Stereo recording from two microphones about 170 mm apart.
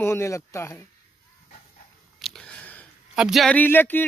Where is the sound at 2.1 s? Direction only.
Centre (ahead or behind).